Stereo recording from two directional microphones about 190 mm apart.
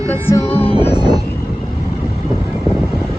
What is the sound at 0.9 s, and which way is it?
Vehicle, 25° right (ahead or behind).